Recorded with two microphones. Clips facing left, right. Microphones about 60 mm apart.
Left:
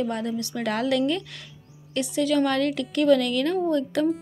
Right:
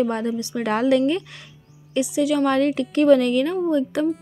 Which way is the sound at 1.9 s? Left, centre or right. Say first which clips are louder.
Right 3 dB; centre.